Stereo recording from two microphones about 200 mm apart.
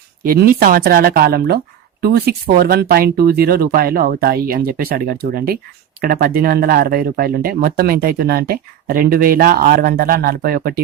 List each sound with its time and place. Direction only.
0.3 s speech: 45° right (ahead or behind)